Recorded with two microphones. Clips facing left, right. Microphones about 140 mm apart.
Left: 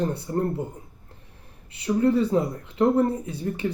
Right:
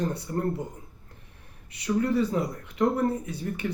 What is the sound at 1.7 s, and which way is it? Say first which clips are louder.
Speech: left 4 dB; 30° left (ahead or behind).